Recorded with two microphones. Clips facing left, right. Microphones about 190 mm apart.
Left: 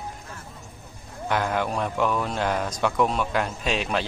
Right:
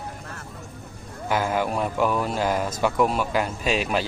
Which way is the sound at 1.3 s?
5° right (ahead or behind).